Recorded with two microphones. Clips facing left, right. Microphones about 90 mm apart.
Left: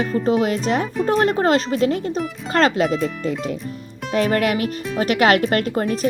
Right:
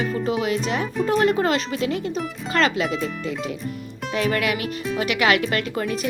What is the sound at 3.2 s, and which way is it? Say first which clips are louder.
Speech: left 3 dB; 40° left (ahead or behind).